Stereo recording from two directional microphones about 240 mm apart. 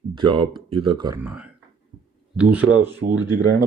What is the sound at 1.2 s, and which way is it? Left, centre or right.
Speech, centre.